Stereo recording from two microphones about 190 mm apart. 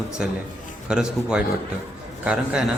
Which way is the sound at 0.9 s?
5° right (ahead or behind).